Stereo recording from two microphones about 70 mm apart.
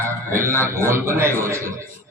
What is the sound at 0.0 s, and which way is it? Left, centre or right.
A man's voice, right.